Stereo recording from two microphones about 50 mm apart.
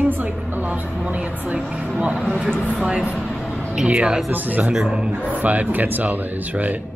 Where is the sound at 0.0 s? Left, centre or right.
Right.